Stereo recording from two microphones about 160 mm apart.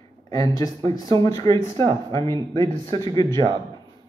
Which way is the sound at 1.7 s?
30° right (ahead or behind).